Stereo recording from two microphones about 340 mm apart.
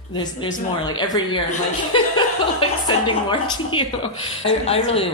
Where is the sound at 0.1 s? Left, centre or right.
Centre.